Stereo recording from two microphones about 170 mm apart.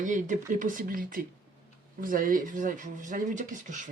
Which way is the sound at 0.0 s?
50° right (ahead or behind).